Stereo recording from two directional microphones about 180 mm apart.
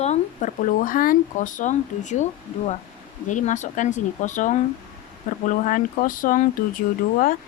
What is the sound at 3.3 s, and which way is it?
Speech, 45° left (ahead or behind).